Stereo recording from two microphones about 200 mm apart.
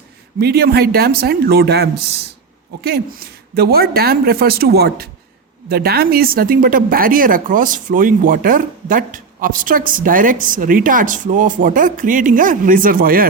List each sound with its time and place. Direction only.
0.3 s speech: 50° right (ahead or behind)